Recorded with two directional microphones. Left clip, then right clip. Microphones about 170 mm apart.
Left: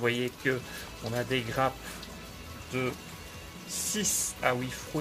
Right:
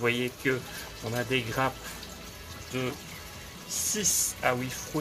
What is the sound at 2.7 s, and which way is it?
Speech, 20° left (ahead or behind).